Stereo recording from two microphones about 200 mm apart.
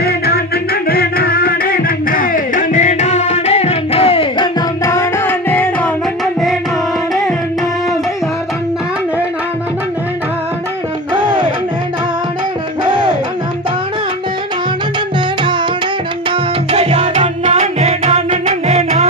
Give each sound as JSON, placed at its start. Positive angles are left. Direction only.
{"t": 0.0, "sound": "music", "side_deg": 50}
{"t": 4.8, "sound": "music", "side_deg": 15}
{"t": 11.1, "sound": "music", "side_deg": -20}
{"t": 16.3, "sound": "music", "side_deg": -35}